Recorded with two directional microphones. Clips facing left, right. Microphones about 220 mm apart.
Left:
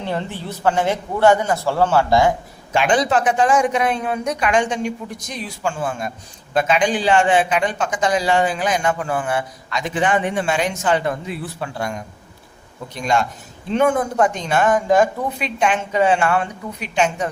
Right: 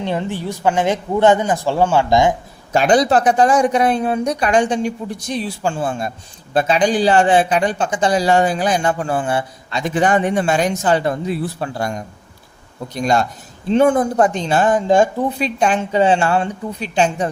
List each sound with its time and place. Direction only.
0.0 s a man's voice: 15° right (ahead or behind)
2.7 s speech: 40° right (ahead or behind)
9.8 s speech: 40° right (ahead or behind)